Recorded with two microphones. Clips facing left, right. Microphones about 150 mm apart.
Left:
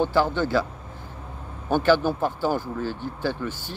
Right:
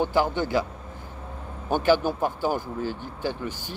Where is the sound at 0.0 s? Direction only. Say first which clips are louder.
Left 2 dB; 15° right (ahead or behind).